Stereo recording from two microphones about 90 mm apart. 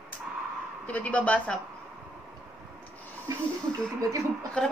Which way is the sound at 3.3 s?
35° right (ahead or behind).